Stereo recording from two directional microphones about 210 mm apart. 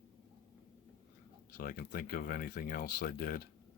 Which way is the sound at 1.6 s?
45° left (ahead or behind).